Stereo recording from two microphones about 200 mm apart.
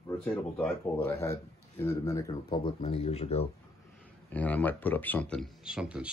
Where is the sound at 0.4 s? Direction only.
10° left (ahead or behind); by 3.4 s 30° left (ahead or behind).